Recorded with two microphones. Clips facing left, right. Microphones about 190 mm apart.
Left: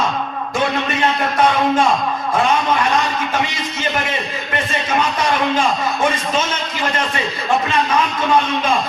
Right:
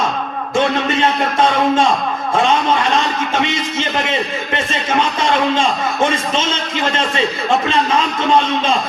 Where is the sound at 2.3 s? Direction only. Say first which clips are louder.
Right 2 dB; 25° right (ahead or behind).